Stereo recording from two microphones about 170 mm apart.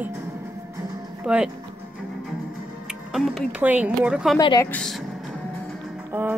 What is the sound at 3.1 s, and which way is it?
Music, centre (ahead or behind).